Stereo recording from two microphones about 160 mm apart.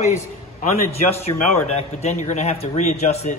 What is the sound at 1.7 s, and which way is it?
Speech, 45° left (ahead or behind).